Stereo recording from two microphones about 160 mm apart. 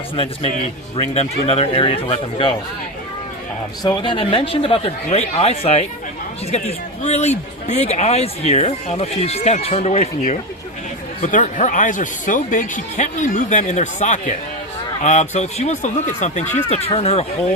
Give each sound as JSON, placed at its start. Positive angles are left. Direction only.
{"t": 1.5, "sound": "a man's voice", "side_deg": 40}
{"t": 3.8, "sound": "a man's voice", "side_deg": 30}